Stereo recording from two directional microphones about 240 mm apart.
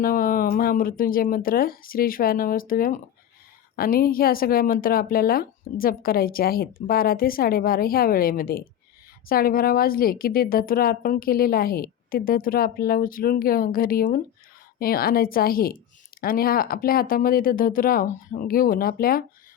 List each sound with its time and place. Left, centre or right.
0.0 s a woman's voice: left